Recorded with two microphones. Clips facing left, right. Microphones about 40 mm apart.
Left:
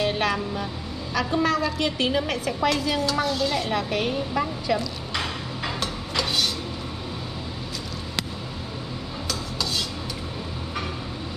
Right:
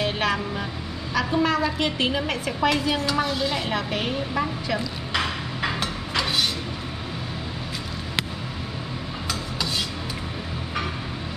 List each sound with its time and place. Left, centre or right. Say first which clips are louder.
0.0 s vehicle: even; centre
1.1 s a woman's voice: right 1 dB; centre